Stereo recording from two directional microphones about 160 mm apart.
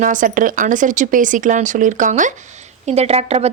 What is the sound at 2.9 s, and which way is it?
Speech, 40° right (ahead or behind).